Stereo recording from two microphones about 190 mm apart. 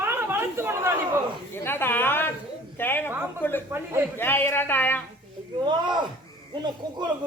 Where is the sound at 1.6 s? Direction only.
10° left (ahead or behind).